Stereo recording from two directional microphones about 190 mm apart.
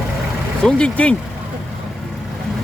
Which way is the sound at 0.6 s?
5° left (ahead or behind).